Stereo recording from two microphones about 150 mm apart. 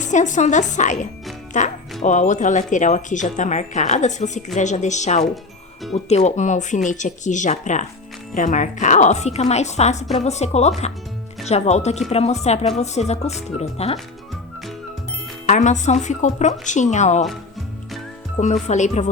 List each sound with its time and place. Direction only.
0.0 s speech: 55° left (ahead or behind)
15.4 s speech: 55° left (ahead or behind)
18.3 s speech: 50° left (ahead or behind)